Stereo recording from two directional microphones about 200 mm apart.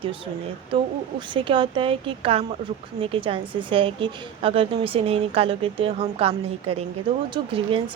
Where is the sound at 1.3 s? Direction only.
25° right (ahead or behind).